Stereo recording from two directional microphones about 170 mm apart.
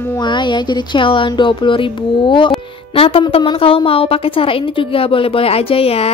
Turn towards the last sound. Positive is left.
turn(degrees=35)  # may be behind; listen again after turning